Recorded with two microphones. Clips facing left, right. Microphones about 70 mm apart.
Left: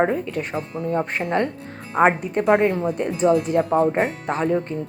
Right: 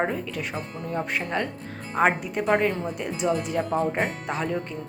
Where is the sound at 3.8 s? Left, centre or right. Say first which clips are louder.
Left 6 dB; left.